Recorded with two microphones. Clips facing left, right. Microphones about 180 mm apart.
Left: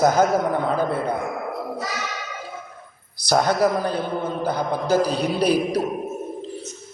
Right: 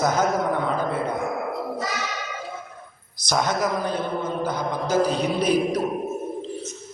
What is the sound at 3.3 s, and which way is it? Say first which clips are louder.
A man's voice: left 4 dB; 35° left (ahead or behind).